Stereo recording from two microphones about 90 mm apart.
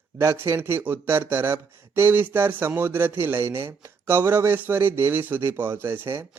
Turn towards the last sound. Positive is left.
turn(degrees=-25)  # may be behind; listen again after turning